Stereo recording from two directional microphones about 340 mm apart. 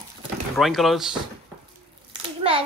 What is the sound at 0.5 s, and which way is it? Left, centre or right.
Speech, centre.